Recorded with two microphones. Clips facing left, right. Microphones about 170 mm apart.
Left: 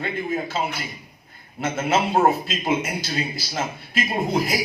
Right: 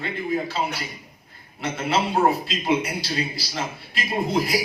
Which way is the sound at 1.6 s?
45° left (ahead or behind).